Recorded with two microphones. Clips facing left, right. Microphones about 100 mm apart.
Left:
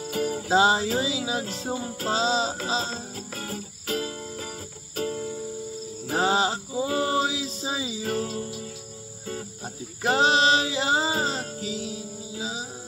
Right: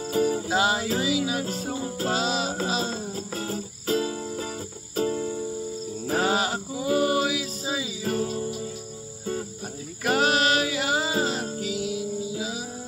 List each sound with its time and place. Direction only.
0.0 s music: 30° right (ahead or behind)
0.5 s music: 30° left (ahead or behind)
3.3 s music: 30° right (ahead or behind)
6.1 s music: 30° left (ahead or behind)
8.2 s music: 30° right (ahead or behind)
10.0 s music: 25° left (ahead or behind)